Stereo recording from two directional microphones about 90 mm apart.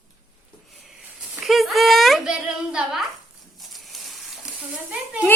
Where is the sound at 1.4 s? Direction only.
Centre (ahead or behind).